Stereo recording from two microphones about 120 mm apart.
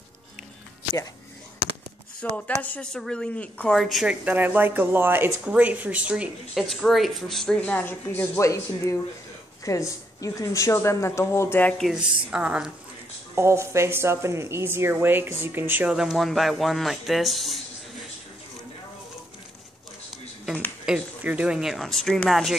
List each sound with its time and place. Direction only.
2.1 s speech: 10° left (ahead or behind); by 6.3 s 10° right (ahead or behind)
6.5 s speech: 5° left (ahead or behind)
7.7 s speech: 15° left (ahead or behind)
11.8 s speech: 5° right (ahead or behind)
13.3 s speech: 25° right (ahead or behind); by 17.6 s centre (ahead or behind)
20.8 s speech: 10° right (ahead or behind)